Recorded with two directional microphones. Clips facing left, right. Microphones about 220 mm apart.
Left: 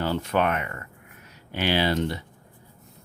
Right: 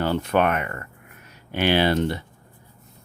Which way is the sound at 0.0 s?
55° right (ahead or behind).